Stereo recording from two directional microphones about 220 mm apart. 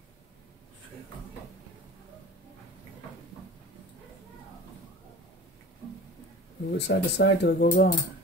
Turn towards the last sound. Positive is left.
turn(degrees=35)  # may be behind; listen again after turning